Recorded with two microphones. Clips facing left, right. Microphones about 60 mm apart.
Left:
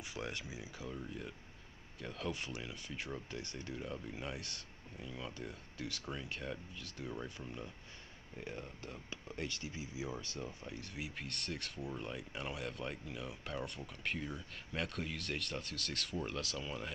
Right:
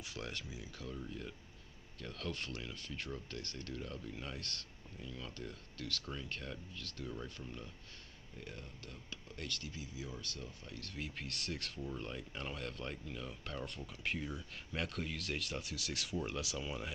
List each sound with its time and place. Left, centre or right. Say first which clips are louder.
0.0 s speech: left 2 dB; centre